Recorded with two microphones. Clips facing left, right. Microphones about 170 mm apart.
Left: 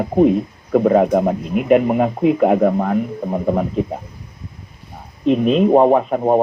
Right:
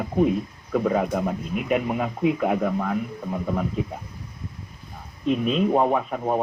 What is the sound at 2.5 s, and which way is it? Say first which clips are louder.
Speech: left 8 dB; 45° left (ahead or behind).